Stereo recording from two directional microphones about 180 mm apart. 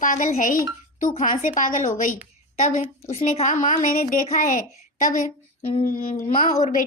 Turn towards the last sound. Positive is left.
turn(degrees=45)  # may be behind; listen again after turning